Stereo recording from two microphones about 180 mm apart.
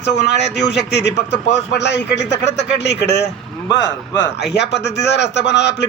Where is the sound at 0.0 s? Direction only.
70° left (ahead or behind).